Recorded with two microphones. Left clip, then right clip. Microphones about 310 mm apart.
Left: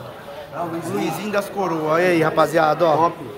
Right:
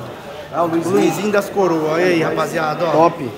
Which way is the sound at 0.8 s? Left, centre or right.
Centre.